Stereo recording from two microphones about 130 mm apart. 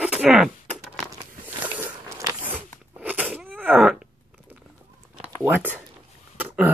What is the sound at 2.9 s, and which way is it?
Crunch, 15° right (ahead or behind).